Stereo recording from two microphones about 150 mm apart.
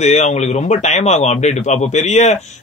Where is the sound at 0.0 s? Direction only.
50° left (ahead or behind).